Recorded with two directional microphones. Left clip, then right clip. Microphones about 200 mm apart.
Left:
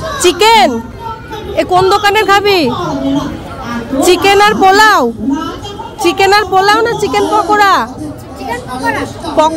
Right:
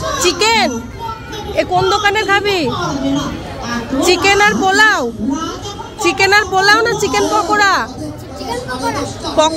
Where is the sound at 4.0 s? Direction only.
25° left (ahead or behind).